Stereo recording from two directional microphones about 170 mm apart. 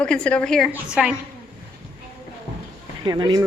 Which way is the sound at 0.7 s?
5° right (ahead or behind).